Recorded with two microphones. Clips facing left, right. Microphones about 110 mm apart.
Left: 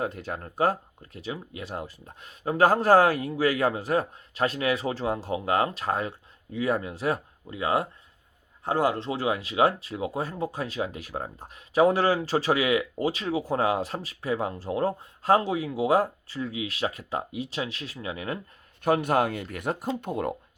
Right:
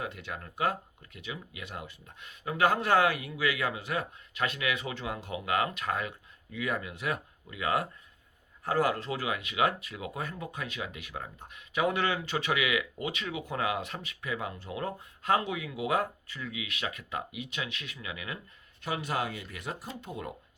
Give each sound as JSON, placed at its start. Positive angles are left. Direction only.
{"t": 0.0, "sound": "speech", "side_deg": 40}
{"t": 18.8, "sound": "speech", "side_deg": 55}